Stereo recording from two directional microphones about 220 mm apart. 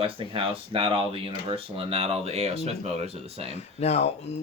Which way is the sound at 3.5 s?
30° left (ahead or behind).